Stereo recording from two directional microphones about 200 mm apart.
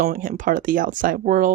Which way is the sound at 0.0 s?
40° right (ahead or behind).